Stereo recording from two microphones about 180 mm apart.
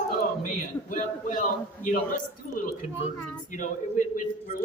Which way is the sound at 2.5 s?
50° left (ahead or behind).